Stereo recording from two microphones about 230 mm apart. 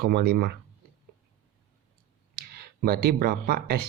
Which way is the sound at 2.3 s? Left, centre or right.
Right.